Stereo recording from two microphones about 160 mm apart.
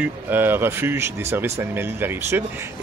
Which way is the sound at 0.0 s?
10° right (ahead or behind).